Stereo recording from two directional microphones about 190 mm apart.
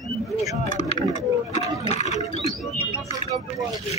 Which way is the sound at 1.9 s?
35° left (ahead or behind).